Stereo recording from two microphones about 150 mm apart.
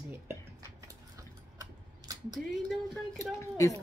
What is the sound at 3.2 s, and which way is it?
Speech, 20° left (ahead or behind).